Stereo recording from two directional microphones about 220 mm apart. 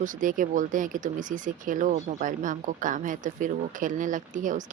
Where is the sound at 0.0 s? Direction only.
35° right (ahead or behind).